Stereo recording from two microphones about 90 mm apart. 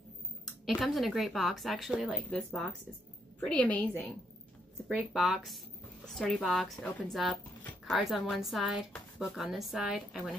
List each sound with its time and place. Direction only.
0.7 s a woman's voice: centre (ahead or behind)
2.1 s speech: 10° left (ahead or behind)
5.1 s a woman's voice: 5° right (ahead or behind)
6.1 s speech: 10° left (ahead or behind)
6.4 s a woman's voice: centre (ahead or behind)